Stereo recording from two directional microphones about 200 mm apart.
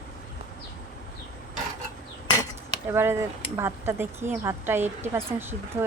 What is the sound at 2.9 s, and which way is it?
Speech, 10° right (ahead or behind).